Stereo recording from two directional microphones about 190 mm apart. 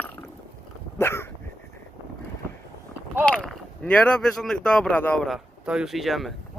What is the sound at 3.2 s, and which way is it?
Speech, 5° left (ahead or behind).